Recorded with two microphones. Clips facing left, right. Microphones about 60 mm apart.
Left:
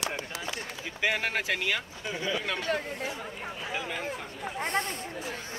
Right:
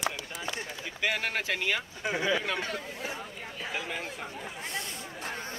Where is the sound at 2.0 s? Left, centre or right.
Centre.